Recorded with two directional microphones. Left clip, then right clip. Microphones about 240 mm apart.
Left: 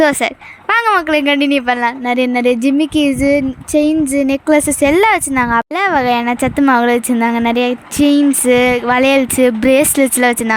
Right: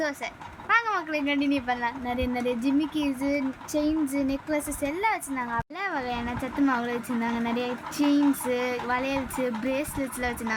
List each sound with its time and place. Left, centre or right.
0.0 s speech: left